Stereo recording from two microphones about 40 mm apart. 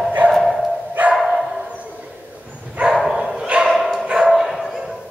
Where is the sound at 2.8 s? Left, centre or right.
Right.